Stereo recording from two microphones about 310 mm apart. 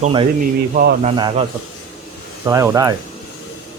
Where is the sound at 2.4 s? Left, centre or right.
Centre.